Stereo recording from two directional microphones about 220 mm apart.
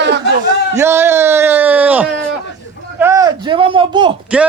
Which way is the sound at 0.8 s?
10° right (ahead or behind).